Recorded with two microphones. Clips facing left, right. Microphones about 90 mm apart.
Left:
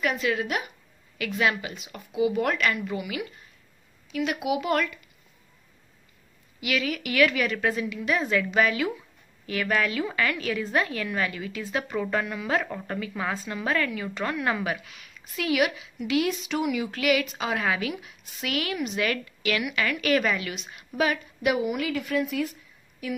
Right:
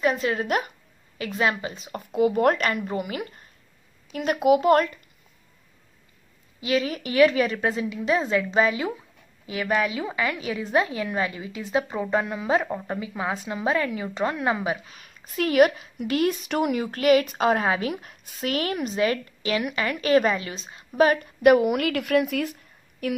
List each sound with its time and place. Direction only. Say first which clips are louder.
0.0 s a woman's voice: right 3 dB; 35° right (ahead or behind)
6.6 s a woman's voice: right 3 dB; 35° right (ahead or behind)
14.9 s a woman's voice: right 1 dB; 40° right (ahead or behind)
17.6 s speech: right 3 dB; 35° right (ahead or behind)
21.2 s a woman's voice: right 8 dB; 55° right (ahead or behind)